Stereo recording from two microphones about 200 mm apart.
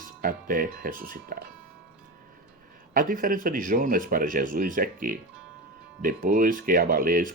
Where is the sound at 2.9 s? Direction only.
45° right (ahead or behind).